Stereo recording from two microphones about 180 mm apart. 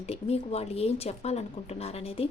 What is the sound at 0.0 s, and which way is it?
Speech, 35° left (ahead or behind).